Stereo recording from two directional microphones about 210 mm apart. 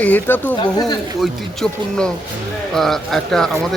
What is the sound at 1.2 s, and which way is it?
Speech, centre (ahead or behind).